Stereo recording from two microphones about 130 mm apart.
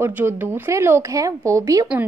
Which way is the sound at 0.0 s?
15° right (ahead or behind).